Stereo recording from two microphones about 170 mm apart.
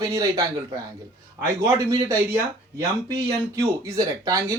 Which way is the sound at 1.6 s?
20° right (ahead or behind).